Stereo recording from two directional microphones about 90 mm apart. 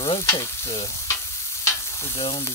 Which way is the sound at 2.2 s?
90° left.